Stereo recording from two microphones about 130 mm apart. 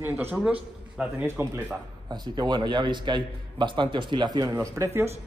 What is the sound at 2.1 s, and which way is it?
Speech, 35° right (ahead or behind).